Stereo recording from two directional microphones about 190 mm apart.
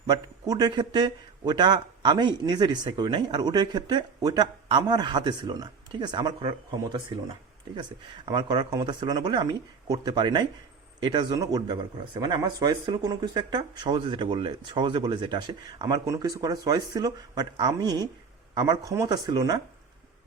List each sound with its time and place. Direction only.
0.1 s a man's voice: 20° right (ahead or behind)